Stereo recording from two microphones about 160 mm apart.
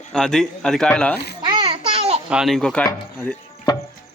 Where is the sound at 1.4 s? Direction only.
30° right (ahead or behind).